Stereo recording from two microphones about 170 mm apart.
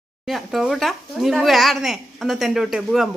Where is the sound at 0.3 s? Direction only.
Centre (ahead or behind).